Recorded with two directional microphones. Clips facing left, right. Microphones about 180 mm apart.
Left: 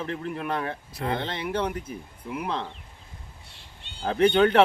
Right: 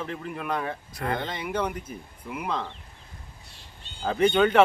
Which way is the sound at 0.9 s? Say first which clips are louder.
Left 1 dB; 25° left (ahead or behind).